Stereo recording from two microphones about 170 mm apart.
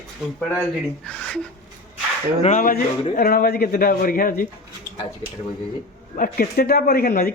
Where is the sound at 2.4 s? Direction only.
45° left (ahead or behind).